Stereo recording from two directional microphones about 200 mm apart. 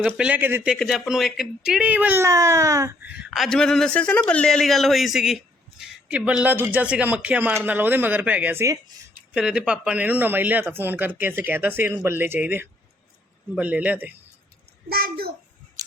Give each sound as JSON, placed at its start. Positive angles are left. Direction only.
{"t": 0.0, "sound": "speech", "side_deg": -5}
{"t": 14.8, "sound": "a child's voice", "side_deg": -50}